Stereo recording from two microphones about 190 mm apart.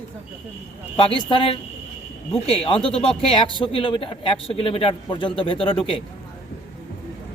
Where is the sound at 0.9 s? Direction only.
25° left (ahead or behind).